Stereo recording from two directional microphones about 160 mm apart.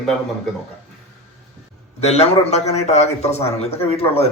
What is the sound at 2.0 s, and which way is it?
Speech, 40° left (ahead or behind).